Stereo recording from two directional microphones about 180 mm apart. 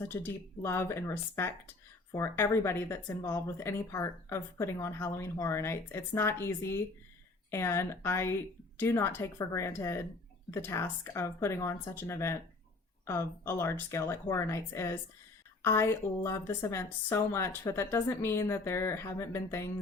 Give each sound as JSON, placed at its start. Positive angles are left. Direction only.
{"t": 0.1, "sound": "speech", "side_deg": 15}